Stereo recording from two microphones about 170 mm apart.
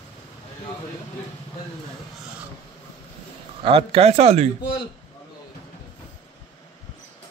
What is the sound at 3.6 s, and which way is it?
Speech, 35° right (ahead or behind).